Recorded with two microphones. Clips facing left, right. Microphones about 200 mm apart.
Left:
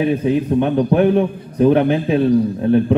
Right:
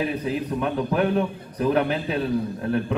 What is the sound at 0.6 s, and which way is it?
A man's voice, 35° left (ahead or behind).